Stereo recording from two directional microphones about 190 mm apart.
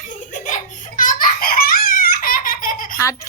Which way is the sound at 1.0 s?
45° left (ahead or behind).